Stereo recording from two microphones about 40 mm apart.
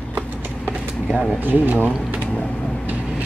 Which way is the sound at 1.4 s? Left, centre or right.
Right.